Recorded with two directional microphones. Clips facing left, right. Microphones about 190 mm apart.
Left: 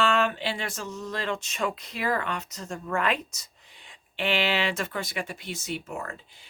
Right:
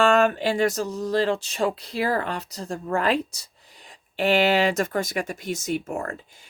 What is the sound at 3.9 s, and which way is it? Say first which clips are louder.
Speech: right 7 dB; 40° right (ahead or behind).